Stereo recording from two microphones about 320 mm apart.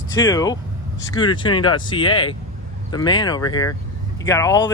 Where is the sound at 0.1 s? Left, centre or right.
Centre.